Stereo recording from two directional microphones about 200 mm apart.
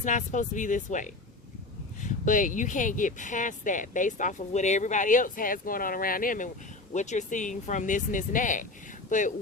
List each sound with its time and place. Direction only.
0.0 s speech: 40° left (ahead or behind)